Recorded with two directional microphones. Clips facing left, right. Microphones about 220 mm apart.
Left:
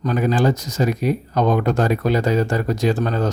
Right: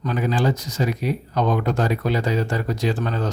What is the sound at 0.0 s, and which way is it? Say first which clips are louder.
A man's voice: left 4 dB; 45° left (ahead or behind).